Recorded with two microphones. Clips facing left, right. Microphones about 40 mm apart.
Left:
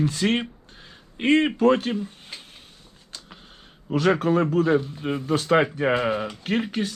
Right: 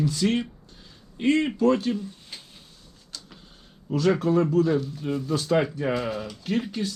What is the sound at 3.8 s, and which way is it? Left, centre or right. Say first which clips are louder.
A man's voice: left 2 dB; left.